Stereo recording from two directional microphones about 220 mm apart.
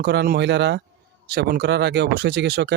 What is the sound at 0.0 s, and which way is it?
Speech, 50° right (ahead or behind).